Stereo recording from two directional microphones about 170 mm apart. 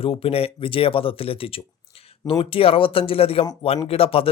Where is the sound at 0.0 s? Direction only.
35° left (ahead or behind).